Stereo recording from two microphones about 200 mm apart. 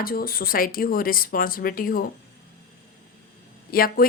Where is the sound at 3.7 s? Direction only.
50° left (ahead or behind).